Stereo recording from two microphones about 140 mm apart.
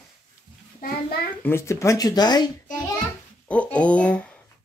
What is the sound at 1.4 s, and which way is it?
Speech, 20° left (ahead or behind).